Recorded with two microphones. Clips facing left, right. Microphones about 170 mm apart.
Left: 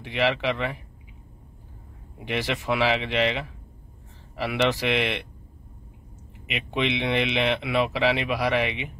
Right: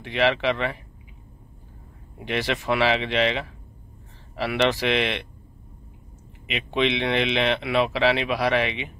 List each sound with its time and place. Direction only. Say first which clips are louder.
0.0 s speech: right 2 dB; 10° left (ahead or behind)
2.1 s speech: right 2 dB; 10° left (ahead or behind)
4.5 s speech: right 2 dB; 10° left (ahead or behind)
6.4 s speech: right 3 dB; 10° left (ahead or behind)